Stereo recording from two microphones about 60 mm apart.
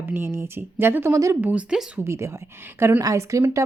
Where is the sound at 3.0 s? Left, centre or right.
Right.